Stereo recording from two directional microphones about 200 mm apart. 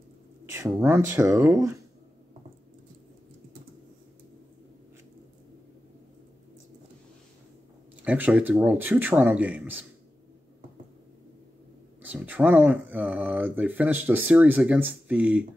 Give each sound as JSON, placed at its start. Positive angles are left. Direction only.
{"t": 0.5, "sound": "speech", "side_deg": -15}
{"t": 8.0, "sound": "speech", "side_deg": -5}
{"t": 12.0, "sound": "speech", "side_deg": -10}